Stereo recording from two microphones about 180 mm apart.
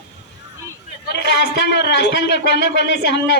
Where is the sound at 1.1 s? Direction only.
70° left (ahead or behind).